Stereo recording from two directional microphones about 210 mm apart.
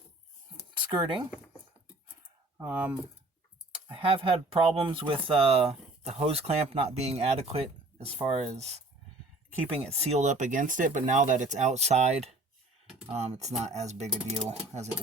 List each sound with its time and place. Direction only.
0.8 s speech: 20° right (ahead or behind)
2.6 s speech: 10° right (ahead or behind)
3.8 s speech: 25° right (ahead or behind)
9.9 s speech: 30° right (ahead or behind)